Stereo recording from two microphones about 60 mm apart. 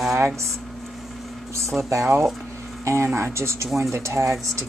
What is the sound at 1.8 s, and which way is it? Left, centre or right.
Speech, right.